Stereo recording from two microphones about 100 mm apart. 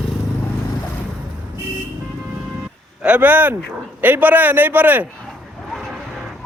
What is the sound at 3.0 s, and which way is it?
A man's voice, 15° right (ahead or behind).